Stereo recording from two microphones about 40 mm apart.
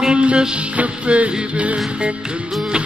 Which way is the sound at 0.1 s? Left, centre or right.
Right.